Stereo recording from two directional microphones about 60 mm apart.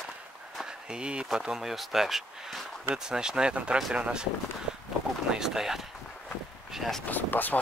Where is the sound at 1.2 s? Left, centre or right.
Centre.